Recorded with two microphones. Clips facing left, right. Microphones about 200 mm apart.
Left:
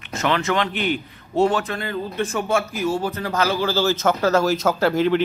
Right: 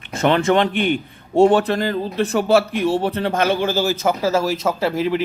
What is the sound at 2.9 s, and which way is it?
Speech, 30° right (ahead or behind).